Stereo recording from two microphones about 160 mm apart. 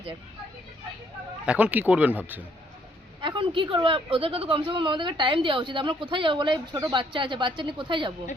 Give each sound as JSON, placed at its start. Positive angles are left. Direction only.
{"t": 1.5, "sound": "speech", "side_deg": -10}
{"t": 3.2, "sound": "speech", "side_deg": -30}